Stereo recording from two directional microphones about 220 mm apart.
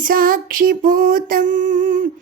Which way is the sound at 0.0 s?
40° right (ahead or behind).